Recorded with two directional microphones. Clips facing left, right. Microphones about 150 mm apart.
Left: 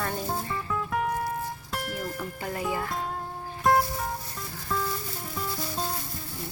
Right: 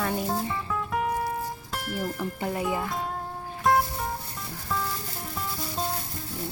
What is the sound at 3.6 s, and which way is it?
Music, centre (ahead or behind).